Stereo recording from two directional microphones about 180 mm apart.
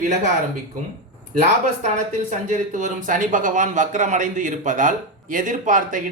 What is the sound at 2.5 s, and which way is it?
A man's voice, 45° right (ahead or behind).